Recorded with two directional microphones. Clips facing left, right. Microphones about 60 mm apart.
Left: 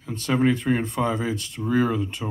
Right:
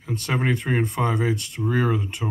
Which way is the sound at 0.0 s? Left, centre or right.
Centre.